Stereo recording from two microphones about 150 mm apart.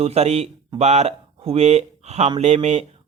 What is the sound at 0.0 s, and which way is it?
Speech, 45° right (ahead or behind).